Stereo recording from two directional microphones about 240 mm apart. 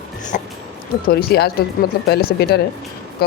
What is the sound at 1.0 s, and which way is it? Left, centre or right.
Speech, left.